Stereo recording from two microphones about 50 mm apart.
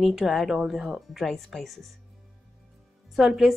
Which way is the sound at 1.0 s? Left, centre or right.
Centre.